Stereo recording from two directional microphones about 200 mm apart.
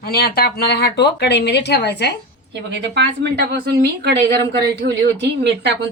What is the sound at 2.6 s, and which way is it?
Speech, 60° right (ahead or behind).